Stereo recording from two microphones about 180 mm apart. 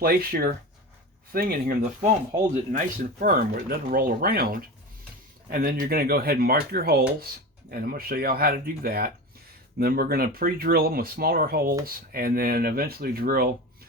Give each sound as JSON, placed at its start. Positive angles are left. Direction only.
{"t": 0.0, "sound": "speech", "side_deg": -55}